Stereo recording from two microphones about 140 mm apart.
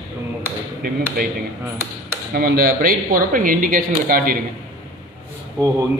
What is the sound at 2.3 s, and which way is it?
Speech, 90° right.